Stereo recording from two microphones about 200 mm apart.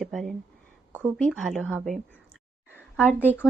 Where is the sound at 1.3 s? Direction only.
5° left (ahead or behind).